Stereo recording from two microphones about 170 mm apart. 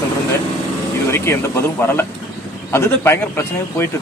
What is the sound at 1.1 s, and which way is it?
Speech, 15° left (ahead or behind).